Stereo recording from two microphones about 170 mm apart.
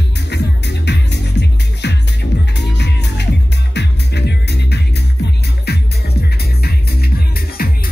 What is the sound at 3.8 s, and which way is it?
Music, 80° left.